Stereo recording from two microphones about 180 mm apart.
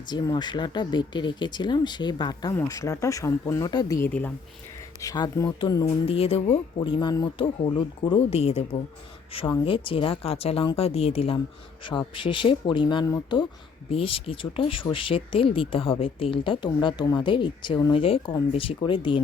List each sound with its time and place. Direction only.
0.1 s a woman's voice: 25° left (ahead or behind)